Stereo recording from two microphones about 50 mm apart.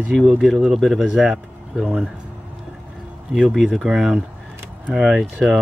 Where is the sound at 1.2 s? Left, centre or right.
Centre.